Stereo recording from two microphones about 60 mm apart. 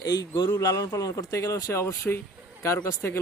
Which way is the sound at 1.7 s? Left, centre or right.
Left.